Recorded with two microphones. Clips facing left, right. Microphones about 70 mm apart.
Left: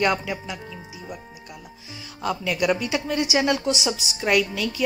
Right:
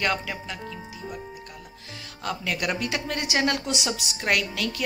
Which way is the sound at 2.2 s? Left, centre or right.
Centre.